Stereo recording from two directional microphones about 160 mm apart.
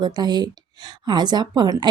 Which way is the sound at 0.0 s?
25° right (ahead or behind).